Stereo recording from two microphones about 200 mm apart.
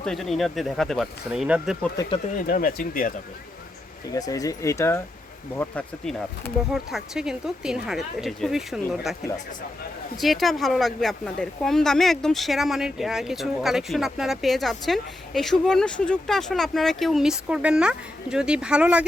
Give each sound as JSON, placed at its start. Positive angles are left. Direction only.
{"t": 0.0, "sound": "speech", "side_deg": 0}
{"t": 2.3, "sound": "speech", "side_deg": 45}
{"t": 4.1, "sound": "speech", "side_deg": 15}
{"t": 10.2, "sound": "speech", "side_deg": 0}